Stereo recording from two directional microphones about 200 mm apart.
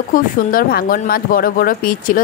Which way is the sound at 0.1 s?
45° left (ahead or behind).